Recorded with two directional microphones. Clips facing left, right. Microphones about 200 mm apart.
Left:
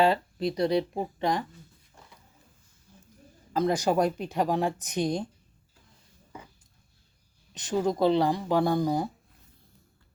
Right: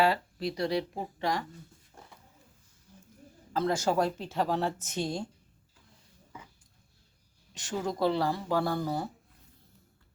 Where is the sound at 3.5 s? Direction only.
15° left (ahead or behind).